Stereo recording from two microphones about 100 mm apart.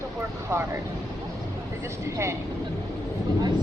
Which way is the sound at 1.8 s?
30° right (ahead or behind).